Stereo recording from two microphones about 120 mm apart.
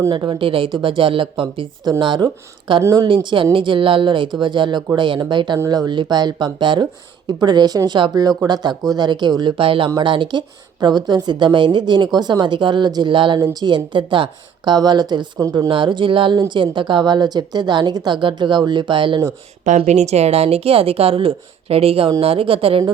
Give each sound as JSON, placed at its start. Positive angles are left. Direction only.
{"t": 0.1, "sound": "speech", "side_deg": -40}
{"t": 19.6, "sound": "speech", "side_deg": -80}